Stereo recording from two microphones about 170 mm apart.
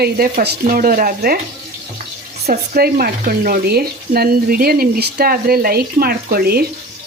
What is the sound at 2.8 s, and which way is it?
Speech, 65° right (ahead or behind).